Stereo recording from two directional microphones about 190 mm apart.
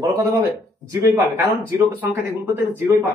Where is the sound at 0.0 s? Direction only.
20° right (ahead or behind).